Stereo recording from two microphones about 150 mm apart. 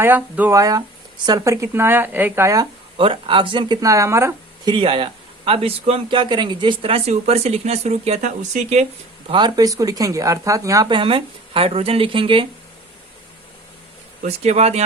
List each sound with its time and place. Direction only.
0.0 s speech: 10° right (ahead or behind)
0.6 s speech: 25° right (ahead or behind)
3.0 s speech: 35° right (ahead or behind); by 4.7 s 20° right (ahead or behind)
4.7 s a man's voice: 35° right (ahead or behind)
9.3 s speech: 30° right (ahead or behind)
10.8 s a man's voice: 35° right (ahead or behind)
14.2 s speech: 45° right (ahead or behind)